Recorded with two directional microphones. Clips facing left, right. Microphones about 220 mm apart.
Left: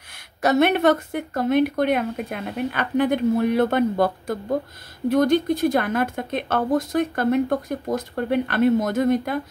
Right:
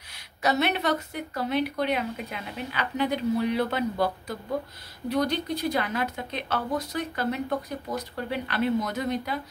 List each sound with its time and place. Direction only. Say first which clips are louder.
0.4 s a woman's voice: left 8 dB; 50° left (ahead or behind)